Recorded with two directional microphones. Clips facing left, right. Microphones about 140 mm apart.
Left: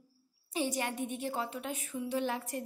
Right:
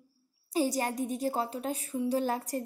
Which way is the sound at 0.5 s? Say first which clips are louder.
Right 5 dB; 40° right (ahead or behind).